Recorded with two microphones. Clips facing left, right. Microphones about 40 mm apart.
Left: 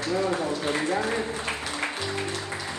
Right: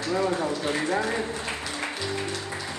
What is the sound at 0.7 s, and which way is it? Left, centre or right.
Speech, left.